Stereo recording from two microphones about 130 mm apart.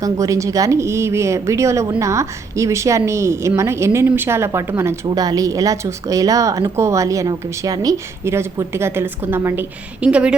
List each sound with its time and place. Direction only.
0.0 s a woman's voice: 25° right (ahead or behind); by 10.3 s 10° right (ahead or behind)